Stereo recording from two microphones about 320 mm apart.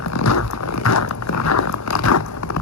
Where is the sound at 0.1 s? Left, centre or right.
Left.